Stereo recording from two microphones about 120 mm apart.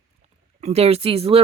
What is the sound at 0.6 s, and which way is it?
Speech, 60° right (ahead or behind).